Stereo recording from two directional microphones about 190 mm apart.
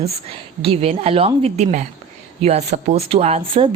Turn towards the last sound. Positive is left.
turn(degrees=-30)  # may be behind; listen again after turning